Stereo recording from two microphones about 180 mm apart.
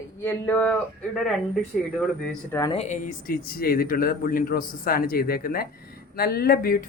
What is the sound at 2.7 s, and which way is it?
A man's voice, 40° left (ahead or behind).